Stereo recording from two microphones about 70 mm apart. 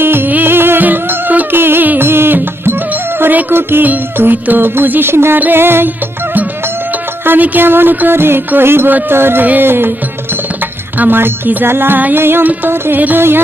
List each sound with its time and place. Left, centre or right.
0.0 s music: right
7.3 s music: right
10.9 s music: right